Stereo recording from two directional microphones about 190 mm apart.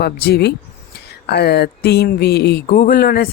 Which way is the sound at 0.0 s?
60° left (ahead or behind).